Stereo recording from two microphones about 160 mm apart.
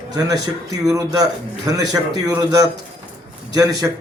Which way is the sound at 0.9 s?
20° right (ahead or behind).